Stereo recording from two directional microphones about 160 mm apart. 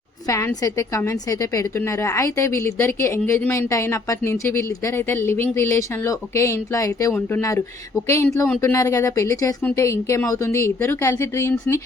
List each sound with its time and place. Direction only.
0.3 s a woman's voice: 20° left (ahead or behind)